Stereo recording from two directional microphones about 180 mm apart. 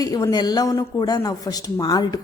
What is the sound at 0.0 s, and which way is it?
Speech, 20° left (ahead or behind).